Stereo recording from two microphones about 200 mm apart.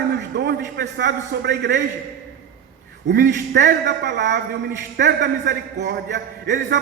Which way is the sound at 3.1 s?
55° right (ahead or behind).